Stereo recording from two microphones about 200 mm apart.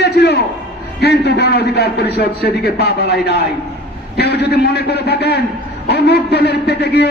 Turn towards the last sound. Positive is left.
turn(degrees=55)  # may be behind; listen again after turning